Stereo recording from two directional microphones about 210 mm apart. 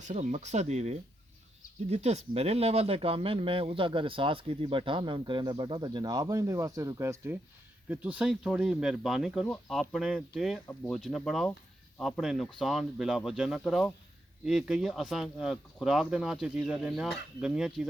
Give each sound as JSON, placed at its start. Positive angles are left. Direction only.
{"t": 0.1, "sound": "speech", "side_deg": -35}